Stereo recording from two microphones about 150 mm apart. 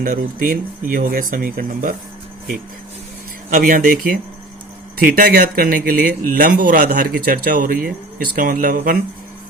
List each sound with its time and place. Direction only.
0.0 s speech: 65° right (ahead or behind)
3.5 s speech: 70° right (ahead or behind)
5.0 s speech: 75° right (ahead or behind)